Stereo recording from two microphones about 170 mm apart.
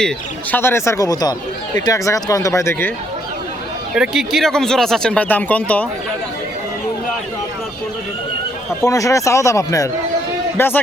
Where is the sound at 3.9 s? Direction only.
Centre (ahead or behind).